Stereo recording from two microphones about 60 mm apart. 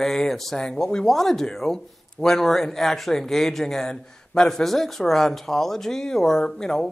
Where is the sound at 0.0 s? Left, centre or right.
Centre.